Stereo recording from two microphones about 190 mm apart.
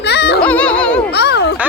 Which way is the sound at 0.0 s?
60° left (ahead or behind).